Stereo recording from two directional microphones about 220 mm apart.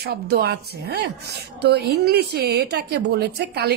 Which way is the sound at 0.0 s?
45° right (ahead or behind).